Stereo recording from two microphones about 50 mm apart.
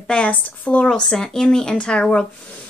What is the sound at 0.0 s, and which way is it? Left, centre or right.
Speech, left.